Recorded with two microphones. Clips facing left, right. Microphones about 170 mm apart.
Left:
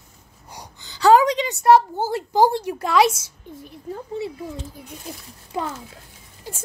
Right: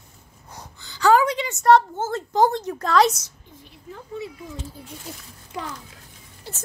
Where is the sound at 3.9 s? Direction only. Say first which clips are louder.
Left 5 dB; 30° left (ahead or behind).